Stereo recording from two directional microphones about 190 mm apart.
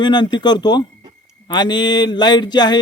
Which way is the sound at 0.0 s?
25° left (ahead or behind).